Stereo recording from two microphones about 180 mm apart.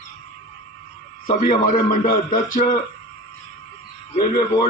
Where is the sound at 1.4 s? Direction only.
50° left (ahead or behind).